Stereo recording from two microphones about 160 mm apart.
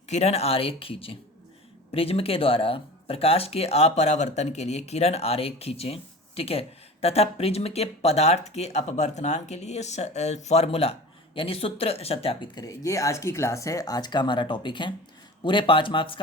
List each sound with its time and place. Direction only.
0.1 s speech: 40° left (ahead or behind)